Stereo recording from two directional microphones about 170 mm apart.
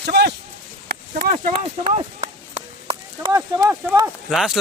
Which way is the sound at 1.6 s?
40° right (ahead or behind).